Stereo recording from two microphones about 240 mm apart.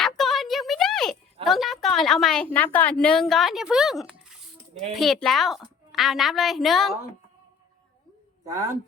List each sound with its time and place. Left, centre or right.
0.0 s a sound: centre
1.5 s a woman's voice: centre
4.7 s speech: right
4.9 s a woman's voice: centre